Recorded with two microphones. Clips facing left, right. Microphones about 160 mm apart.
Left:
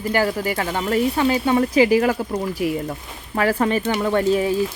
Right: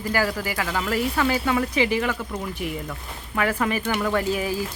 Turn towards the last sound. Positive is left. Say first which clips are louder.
# left 5 dB
turn(degrees=30)  # may be behind; listen again after turning